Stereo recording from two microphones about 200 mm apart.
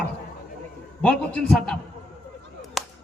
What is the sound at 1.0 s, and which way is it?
Speech, 5° left (ahead or behind).